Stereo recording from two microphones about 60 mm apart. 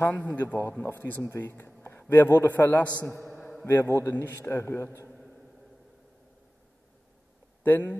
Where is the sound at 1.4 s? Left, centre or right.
Left.